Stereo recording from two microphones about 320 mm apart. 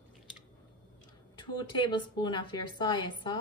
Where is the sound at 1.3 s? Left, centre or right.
Centre.